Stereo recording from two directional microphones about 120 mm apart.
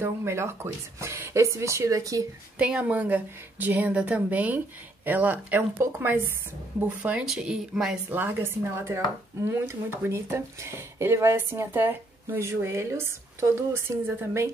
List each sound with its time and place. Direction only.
0.0 s speech: 20° right (ahead or behind)
2.6 s a woman's voice: 10° right (ahead or behind)
8.1 s speech: 15° right (ahead or behind)